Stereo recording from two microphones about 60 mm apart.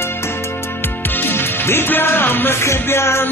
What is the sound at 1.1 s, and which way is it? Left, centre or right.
Music, left.